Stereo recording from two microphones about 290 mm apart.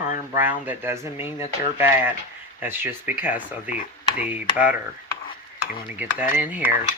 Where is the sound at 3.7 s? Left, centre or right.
Left.